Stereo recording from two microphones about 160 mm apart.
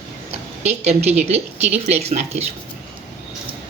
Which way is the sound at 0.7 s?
40° right (ahead or behind).